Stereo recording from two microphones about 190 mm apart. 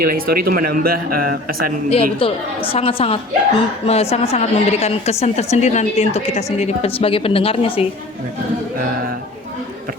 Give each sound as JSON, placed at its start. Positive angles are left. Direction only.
{"t": 0.0, "sound": "speech", "side_deg": -50}
{"t": 1.9, "sound": "a woman's voice", "side_deg": 30}